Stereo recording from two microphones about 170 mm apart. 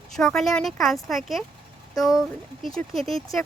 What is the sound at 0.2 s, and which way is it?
Speech, centre (ahead or behind).